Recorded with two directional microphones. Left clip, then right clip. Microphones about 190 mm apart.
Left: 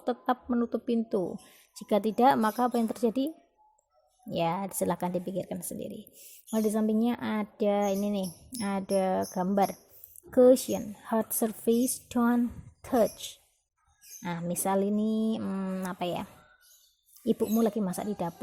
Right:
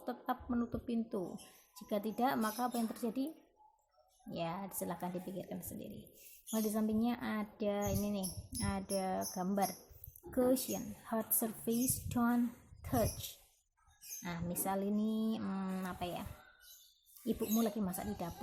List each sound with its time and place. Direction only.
0.0 s a woman's voice: 40° left (ahead or behind)
17.4 s a woman's voice: 35° left (ahead or behind)